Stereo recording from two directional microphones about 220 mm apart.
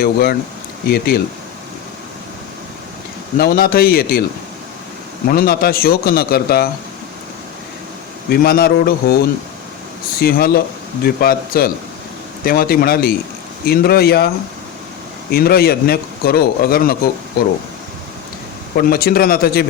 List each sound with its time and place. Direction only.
0.0 s speech: 45° left (ahead or behind)
3.3 s speech: 40° left (ahead or behind)
5.3 s speech: 40° left (ahead or behind)
8.3 s speech: 45° left (ahead or behind)
15.3 s speech: 45° left (ahead or behind)
18.8 s speech: 45° left (ahead or behind)